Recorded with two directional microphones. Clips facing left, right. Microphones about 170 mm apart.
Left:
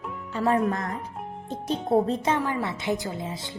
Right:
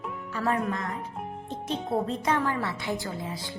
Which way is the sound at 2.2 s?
15° left (ahead or behind).